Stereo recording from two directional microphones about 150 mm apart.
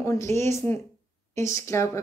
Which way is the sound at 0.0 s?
20° left (ahead or behind).